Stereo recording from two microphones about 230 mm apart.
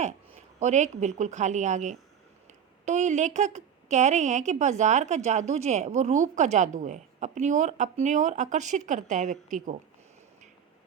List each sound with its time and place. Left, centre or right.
0.3 s speech: right